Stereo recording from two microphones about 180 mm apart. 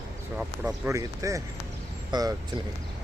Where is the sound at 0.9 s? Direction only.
15° right (ahead or behind).